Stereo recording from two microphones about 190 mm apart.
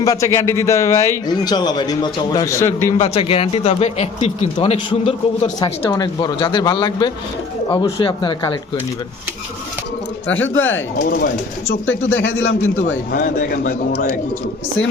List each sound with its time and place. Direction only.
0.0 s a man's voice: 15° left (ahead or behind)
3.0 s speech: 30° left (ahead or behind)
10.2 s speech: 90° left
11.0 s speech: 60° left (ahead or behind)
11.9 s speech: 80° left
13.1 s speech: 45° left (ahead or behind)